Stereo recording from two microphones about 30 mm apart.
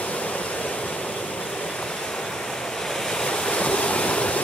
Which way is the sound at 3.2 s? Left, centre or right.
Left.